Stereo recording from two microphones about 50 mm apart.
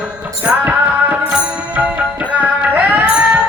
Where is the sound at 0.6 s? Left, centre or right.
Right.